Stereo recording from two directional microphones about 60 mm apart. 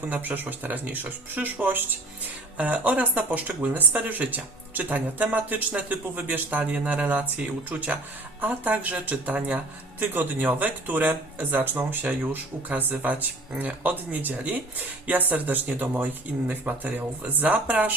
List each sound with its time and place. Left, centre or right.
0.1 s speech: right